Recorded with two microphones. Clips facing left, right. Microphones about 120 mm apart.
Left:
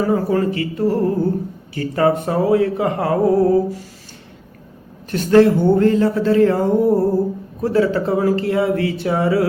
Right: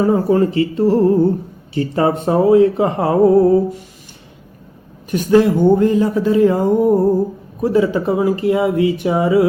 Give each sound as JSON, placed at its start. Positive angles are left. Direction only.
{"t": 0.0, "sound": "speech", "side_deg": -25}
{"t": 5.1, "sound": "speech", "side_deg": -15}